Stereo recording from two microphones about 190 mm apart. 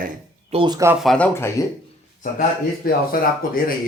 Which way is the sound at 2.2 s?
50° left (ahead or behind).